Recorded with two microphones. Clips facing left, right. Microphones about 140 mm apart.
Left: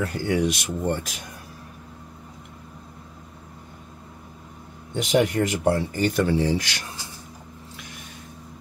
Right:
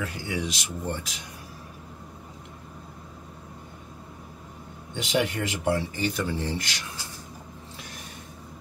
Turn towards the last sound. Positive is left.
turn(degrees=80)